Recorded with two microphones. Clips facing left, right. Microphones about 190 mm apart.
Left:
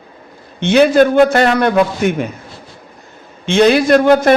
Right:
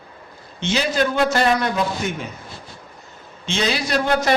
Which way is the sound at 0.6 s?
60° left (ahead or behind).